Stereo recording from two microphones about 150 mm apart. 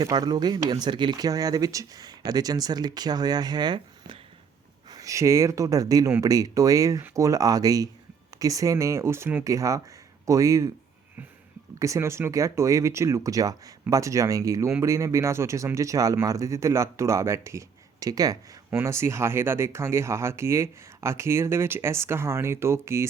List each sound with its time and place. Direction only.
0.0 s speech: 30° right (ahead or behind)
11.8 s speech: 20° right (ahead or behind)